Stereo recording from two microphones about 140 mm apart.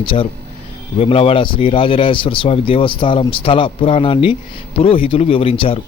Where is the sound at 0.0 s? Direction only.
40° left (ahead or behind).